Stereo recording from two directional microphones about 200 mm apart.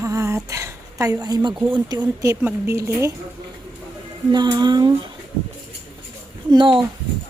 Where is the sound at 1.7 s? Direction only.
20° right (ahead or behind).